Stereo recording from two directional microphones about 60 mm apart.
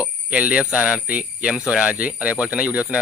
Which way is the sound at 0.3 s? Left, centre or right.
Right.